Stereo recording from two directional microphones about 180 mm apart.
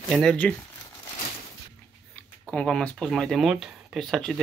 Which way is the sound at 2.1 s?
10° left (ahead or behind).